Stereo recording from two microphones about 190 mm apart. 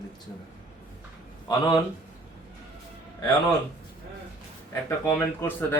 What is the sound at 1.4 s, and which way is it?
Speech, 20° left (ahead or behind).